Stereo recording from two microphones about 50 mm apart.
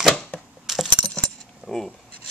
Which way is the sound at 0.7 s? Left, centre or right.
Centre.